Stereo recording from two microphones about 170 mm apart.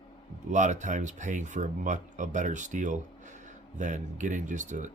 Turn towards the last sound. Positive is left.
turn(degrees=-45)  # may be behind; listen again after turning